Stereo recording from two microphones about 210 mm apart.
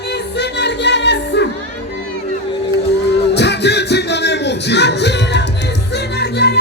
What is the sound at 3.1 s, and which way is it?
Music, 55° left (ahead or behind).